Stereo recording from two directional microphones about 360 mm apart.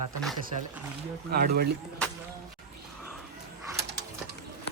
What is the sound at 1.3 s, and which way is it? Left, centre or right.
Speech, right.